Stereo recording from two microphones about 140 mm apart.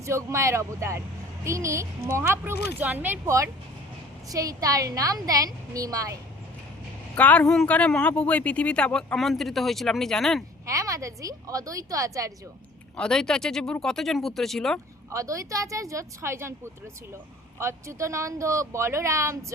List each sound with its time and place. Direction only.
0.0 s speech: 20° right (ahead or behind)
7.2 s speech: 10° left (ahead or behind)
10.7 s speech: 25° right (ahead or behind)
13.0 s speech: 5° left (ahead or behind)
15.1 s speech: 20° right (ahead or behind)
17.6 s speech: 20° right (ahead or behind)